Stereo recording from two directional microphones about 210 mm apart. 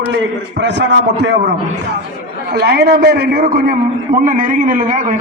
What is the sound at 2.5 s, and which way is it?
A man's voice, 50° right (ahead or behind).